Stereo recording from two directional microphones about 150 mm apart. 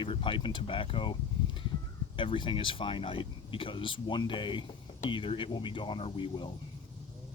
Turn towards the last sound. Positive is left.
turn(degrees=30)  # may be behind; listen again after turning